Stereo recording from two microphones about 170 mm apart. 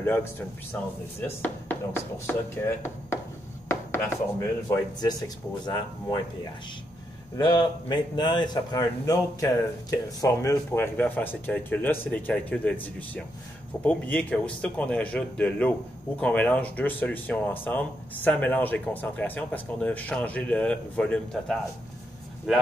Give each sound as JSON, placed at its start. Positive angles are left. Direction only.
{"t": 0.0, "sound": "speech", "side_deg": 15}
{"t": 3.6, "sound": "chopping", "side_deg": 15}
{"t": 7.3, "sound": "speech", "side_deg": 25}